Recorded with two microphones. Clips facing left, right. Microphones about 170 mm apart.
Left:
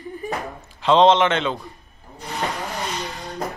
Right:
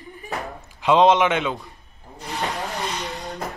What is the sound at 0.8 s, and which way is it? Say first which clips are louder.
Speech: left 1 dB; 10° right (ahead or behind).